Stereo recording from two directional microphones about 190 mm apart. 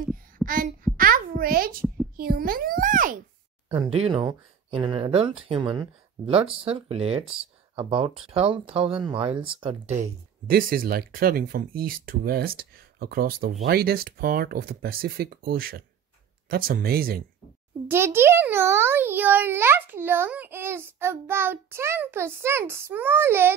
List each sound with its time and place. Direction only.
0.4 s a sound: centre (ahead or behind)
0.9 s a sound: 50° right (ahead or behind)
2.1 s speech: 50° right (ahead or behind)
3.6 s speech: 25° right (ahead or behind)
10.4 s speech: 50° right (ahead or behind)
17.8 s a child's voice: 10° right (ahead or behind)